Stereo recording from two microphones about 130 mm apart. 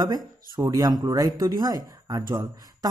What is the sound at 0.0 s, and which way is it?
Speech, 30° right (ahead or behind).